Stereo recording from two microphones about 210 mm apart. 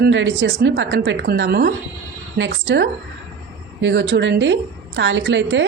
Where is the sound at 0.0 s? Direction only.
60° right (ahead or behind).